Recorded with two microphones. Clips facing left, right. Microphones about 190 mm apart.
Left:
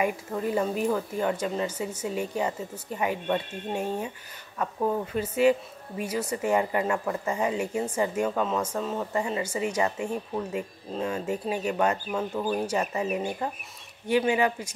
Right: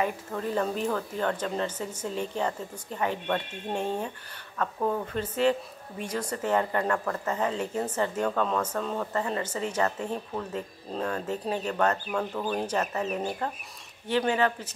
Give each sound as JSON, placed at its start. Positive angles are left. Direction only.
{"t": 0.0, "sound": "speech", "side_deg": 10}